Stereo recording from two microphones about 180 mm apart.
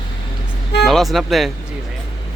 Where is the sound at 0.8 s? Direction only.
Centre (ahead or behind).